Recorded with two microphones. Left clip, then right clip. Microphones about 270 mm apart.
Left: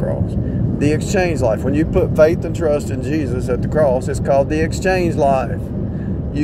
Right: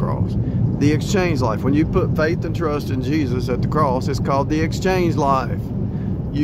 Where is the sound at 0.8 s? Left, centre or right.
Centre.